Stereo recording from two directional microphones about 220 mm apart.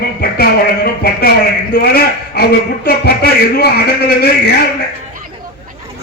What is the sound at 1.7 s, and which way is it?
A man's voice, 45° left (ahead or behind).